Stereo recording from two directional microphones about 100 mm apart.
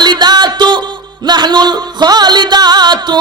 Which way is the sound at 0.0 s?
45° right (ahead or behind).